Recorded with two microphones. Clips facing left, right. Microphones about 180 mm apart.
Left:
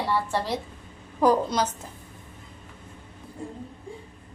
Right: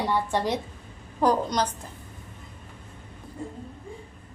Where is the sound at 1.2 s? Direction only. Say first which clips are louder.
Left 2 dB; 5° left (ahead or behind).